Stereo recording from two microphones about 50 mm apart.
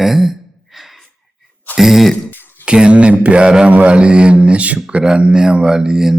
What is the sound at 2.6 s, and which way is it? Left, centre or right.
A man's voice, centre.